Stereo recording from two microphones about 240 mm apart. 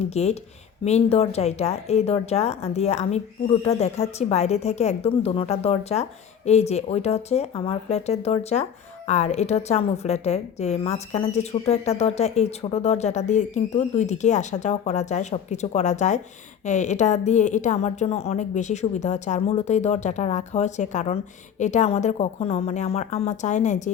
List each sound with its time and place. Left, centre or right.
0.1 s speech: left